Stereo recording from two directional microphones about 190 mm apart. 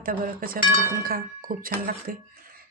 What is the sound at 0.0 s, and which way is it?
Speech, 50° right (ahead or behind).